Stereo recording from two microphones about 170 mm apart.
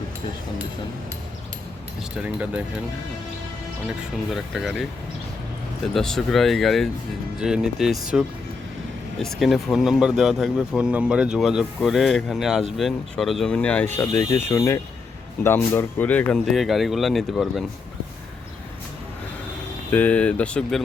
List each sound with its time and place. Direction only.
2.2 s speech: 10° right (ahead or behind)
4.3 s speech: centre (ahead or behind)
5.9 s speech: centre (ahead or behind)
19.9 s speech: 10° left (ahead or behind)